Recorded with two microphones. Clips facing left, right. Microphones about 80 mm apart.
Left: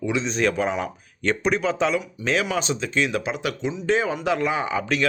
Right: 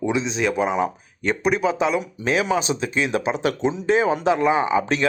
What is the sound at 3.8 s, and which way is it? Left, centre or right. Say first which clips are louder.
Speech: right 3 dB; centre.